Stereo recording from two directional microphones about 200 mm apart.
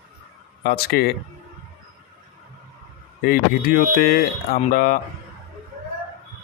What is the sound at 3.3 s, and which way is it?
Speech, 45° left (ahead or behind).